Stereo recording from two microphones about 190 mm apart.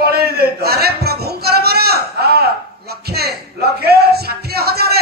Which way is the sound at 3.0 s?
55° right (ahead or behind).